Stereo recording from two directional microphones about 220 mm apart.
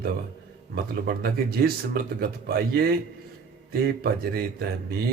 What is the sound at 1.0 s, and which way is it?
Speech, 45° right (ahead or behind).